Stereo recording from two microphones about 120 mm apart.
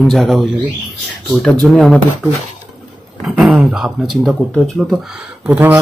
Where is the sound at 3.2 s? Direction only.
5° right (ahead or behind).